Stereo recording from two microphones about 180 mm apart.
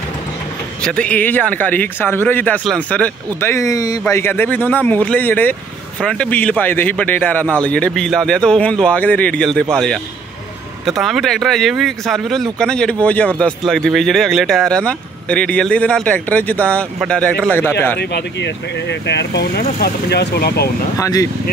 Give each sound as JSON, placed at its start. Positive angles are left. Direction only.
{"t": 0.8, "sound": "speech", "side_deg": 5}
{"t": 10.9, "sound": "speech", "side_deg": 0}
{"t": 17.9, "sound": "speech", "side_deg": 70}
{"t": 21.0, "sound": "speech", "side_deg": 20}